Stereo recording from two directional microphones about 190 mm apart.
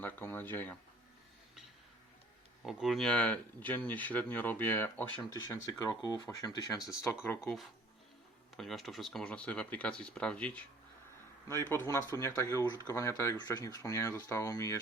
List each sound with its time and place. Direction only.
0.0 s speech: 10° left (ahead or behind)
2.6 s speech: centre (ahead or behind); by 6.8 s 20° left (ahead or behind)
8.5 s speech: centre (ahead or behind); by 14.8 s 15° left (ahead or behind)